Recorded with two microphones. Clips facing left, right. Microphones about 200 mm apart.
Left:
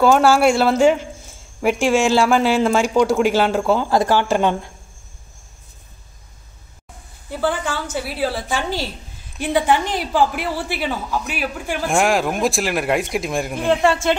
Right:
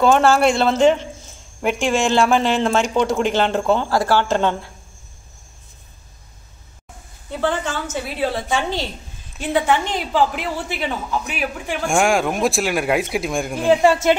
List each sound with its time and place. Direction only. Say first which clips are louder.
0.0 s speech: left 1 dB; 10° left (ahead or behind)
3.9 s speech: left 1 dB; 20° left (ahead or behind)
7.2 s a sound: even; 10° left (ahead or behind)
7.9 s speech: right 1 dB; 5° left (ahead or behind); by 14.1 s 10° right (ahead or behind)